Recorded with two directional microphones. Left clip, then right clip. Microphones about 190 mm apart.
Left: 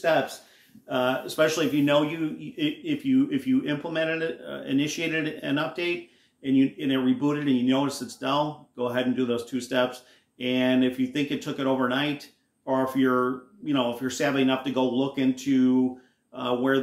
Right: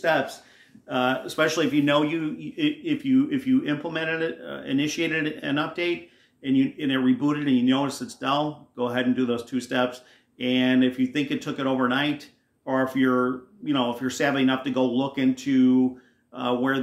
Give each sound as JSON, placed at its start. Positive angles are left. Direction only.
{"t": 0.0, "sound": "speech", "side_deg": -25}